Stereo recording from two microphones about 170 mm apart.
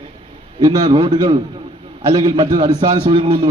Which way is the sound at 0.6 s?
30° right (ahead or behind).